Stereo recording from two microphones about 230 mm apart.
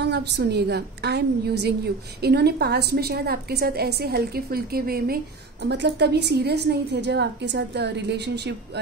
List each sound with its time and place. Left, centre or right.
0.1 s a woman's voice: right